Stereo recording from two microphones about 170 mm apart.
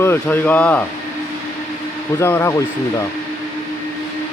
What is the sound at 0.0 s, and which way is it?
Speech, 10° left (ahead or behind).